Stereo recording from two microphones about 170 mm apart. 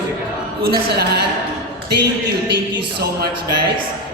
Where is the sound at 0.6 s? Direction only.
65° right (ahead or behind).